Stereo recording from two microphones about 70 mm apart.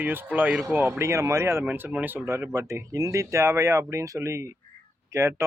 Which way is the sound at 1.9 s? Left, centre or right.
Right.